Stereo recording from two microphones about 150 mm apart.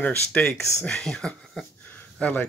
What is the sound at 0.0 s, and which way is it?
Speech, 5° left (ahead or behind).